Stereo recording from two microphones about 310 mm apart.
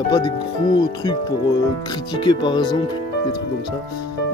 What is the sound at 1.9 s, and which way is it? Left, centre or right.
Speech, centre.